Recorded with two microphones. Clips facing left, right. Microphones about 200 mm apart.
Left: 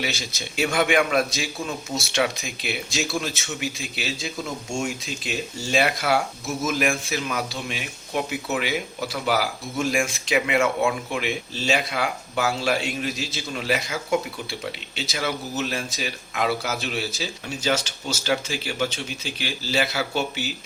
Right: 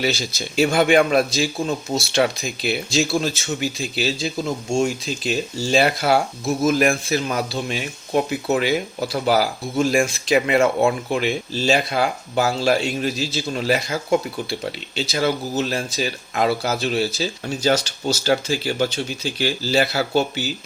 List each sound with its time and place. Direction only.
0.0 s a man's voice: 35° right (ahead or behind)